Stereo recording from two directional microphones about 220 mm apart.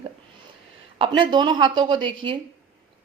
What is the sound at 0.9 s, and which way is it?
Speech, 25° right (ahead or behind).